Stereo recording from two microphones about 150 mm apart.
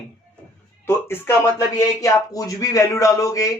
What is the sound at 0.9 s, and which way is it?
A man's voice, 15° left (ahead or behind).